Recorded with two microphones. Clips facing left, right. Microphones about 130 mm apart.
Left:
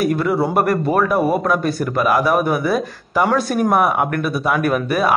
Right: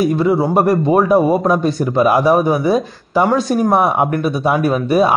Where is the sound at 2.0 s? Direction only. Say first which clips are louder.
Right 3 dB; 30° right (ahead or behind).